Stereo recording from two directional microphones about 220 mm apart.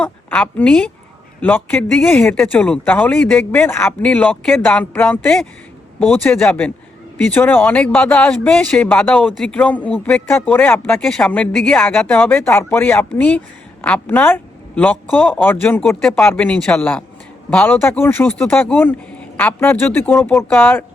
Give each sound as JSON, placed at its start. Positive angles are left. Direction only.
{"t": 0.0, "sound": "speech", "side_deg": 5}